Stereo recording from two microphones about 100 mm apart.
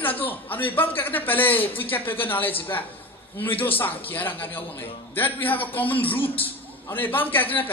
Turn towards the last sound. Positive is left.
turn(degrees=20)  # may be behind; listen again after turning